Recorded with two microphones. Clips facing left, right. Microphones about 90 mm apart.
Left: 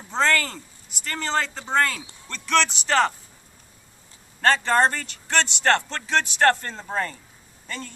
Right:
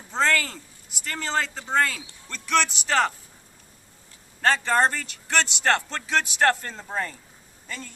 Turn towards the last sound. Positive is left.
turn(degrees=-5)  # may be behind; listen again after turning